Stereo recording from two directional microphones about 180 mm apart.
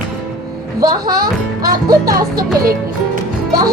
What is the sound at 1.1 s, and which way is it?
Speech, 55° right (ahead or behind).